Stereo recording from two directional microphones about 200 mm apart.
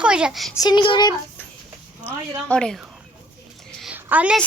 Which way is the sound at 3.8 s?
5° right (ahead or behind).